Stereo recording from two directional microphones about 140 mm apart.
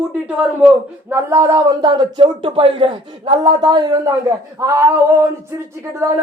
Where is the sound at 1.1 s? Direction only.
20° right (ahead or behind).